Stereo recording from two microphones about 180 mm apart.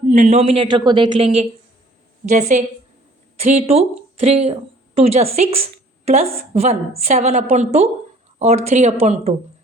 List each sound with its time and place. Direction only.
0.1 s a woman's voice: 40° right (ahead or behind)
2.2 s a woman's voice: 45° right (ahead or behind)